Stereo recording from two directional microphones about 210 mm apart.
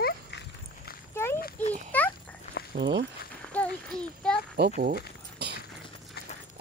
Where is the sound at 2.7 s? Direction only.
60° right (ahead or behind).